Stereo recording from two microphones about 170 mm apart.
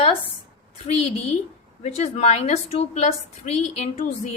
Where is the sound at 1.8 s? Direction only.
40° left (ahead or behind).